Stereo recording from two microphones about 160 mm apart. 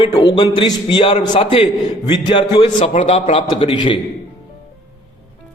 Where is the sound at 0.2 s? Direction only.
30° left (ahead or behind).